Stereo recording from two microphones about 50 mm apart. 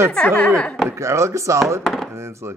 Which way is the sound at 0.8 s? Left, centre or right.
Right.